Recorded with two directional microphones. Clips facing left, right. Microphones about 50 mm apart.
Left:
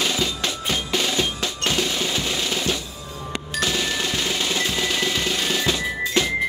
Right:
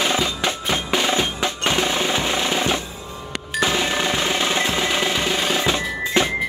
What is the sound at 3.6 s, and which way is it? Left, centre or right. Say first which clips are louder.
Music: right 4 dB; right.